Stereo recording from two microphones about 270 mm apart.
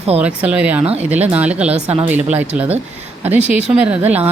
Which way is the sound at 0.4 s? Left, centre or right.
Centre.